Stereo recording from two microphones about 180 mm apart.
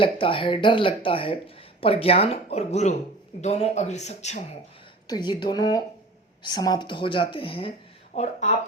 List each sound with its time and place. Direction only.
0.0 s speech: 30° left (ahead or behind)
5.0 s speech: 25° left (ahead or behind)